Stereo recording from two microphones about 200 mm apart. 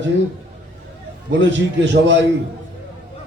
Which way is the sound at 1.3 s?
60° right (ahead or behind).